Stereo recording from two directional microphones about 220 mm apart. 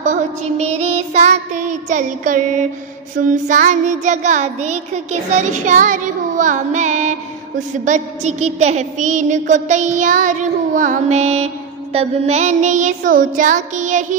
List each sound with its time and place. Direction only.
0.0 s child singing: 30° right (ahead or behind)